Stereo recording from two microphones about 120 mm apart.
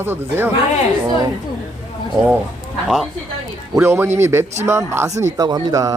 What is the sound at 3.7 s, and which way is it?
Speech, 20° right (ahead or behind).